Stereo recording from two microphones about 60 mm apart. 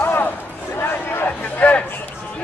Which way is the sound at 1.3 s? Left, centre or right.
Left.